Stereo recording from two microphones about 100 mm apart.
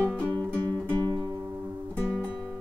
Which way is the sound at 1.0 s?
45° right (ahead or behind).